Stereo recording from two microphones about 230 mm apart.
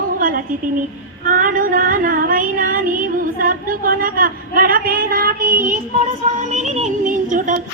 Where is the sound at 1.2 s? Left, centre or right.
Right.